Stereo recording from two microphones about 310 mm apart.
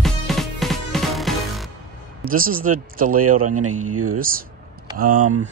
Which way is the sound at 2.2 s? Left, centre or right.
Right.